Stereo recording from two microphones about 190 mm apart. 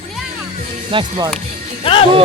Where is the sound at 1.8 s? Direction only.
30° left (ahead or behind).